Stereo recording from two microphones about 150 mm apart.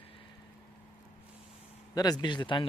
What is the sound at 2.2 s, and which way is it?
Speech, 30° left (ahead or behind).